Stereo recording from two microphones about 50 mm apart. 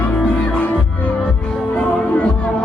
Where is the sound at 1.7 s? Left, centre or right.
Left.